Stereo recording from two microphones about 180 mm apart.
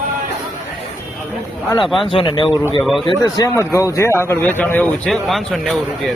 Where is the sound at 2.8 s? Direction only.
Centre (ahead or behind).